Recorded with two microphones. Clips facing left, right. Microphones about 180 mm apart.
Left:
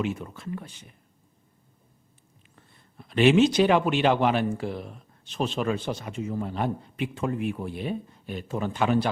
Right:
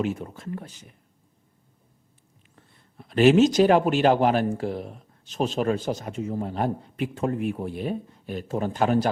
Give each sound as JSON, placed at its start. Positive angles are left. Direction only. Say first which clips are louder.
{"t": 0.0, "sound": "a man's voice", "louder": "right 2 dB", "side_deg": -40}
{"t": 2.6, "sound": "a man's voice", "louder": "right 1 dB", "side_deg": -40}